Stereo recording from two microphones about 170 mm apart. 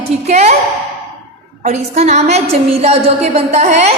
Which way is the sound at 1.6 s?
40° right (ahead or behind).